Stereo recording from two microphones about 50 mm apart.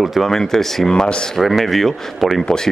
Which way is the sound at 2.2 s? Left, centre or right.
Centre.